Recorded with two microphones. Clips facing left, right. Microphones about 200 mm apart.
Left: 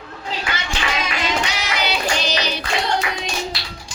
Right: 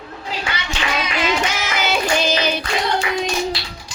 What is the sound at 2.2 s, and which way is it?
Hands, 50° right (ahead or behind).